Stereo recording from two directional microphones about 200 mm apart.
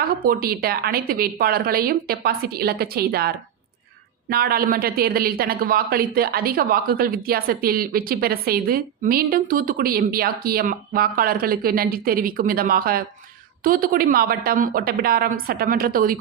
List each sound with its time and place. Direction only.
0.1 s speech: 45° right (ahead or behind)